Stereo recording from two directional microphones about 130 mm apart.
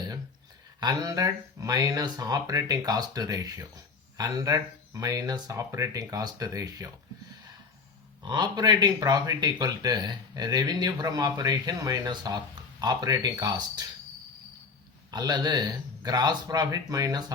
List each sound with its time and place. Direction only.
0.8 s speech: 30° right (ahead or behind)
8.2 s speech: 35° right (ahead or behind)
15.1 s speech: 35° right (ahead or behind)